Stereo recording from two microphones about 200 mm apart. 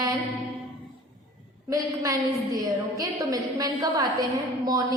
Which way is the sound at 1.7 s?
15° right (ahead or behind).